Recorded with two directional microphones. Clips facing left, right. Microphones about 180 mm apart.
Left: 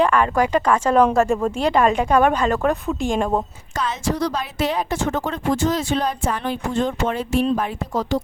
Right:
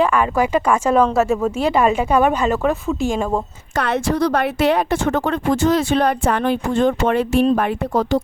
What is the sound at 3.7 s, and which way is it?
A woman's voice, 65° right (ahead or behind).